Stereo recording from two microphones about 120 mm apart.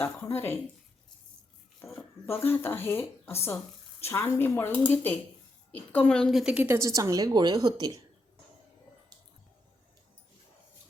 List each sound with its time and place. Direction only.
0.0 s speech: 15° left (ahead or behind)
1.9 s speech: 15° left (ahead or behind)
6.4 s a woman's voice: 10° right (ahead or behind); by 7.9 s 35° right (ahead or behind)